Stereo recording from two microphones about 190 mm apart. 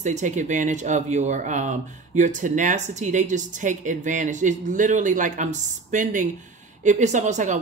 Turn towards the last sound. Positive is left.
turn(degrees=-40)  # may be behind; listen again after turning